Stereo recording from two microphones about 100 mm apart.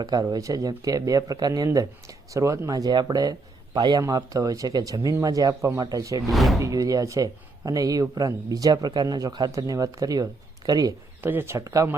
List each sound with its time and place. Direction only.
0.0 s a man's voice: 40° right (ahead or behind)
4.0 s speech: 35° right (ahead or behind)
6.3 s speech: centre (ahead or behind)
6.6 s speech: 35° right (ahead or behind)
11.2 s speech: 20° right (ahead or behind)